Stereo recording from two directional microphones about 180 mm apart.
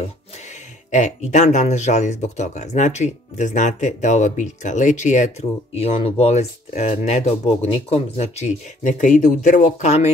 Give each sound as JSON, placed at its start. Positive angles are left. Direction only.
{"t": 0.9, "sound": "speech", "side_deg": 40}